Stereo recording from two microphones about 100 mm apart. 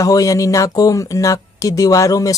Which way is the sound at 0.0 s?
35° left (ahead or behind).